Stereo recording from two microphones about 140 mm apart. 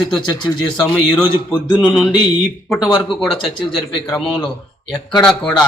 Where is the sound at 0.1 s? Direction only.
5° left (ahead or behind).